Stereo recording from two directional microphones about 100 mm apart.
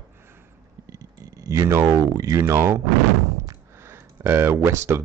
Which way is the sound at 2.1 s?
35° right (ahead or behind).